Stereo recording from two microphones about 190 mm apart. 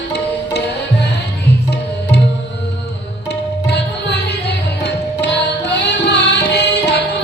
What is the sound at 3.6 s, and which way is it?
Music, 60° left (ahead or behind).